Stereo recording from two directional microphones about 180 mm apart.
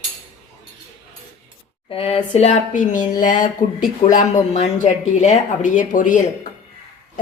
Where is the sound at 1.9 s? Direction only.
30° left (ahead or behind).